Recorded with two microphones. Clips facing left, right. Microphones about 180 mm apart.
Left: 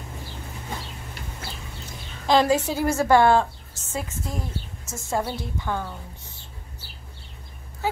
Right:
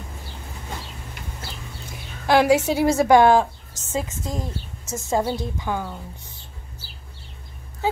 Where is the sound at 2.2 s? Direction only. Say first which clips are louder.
Right 3 dB; 10° right (ahead or behind).